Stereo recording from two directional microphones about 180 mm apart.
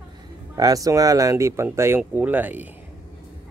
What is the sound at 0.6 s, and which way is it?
Speech, 20° right (ahead or behind).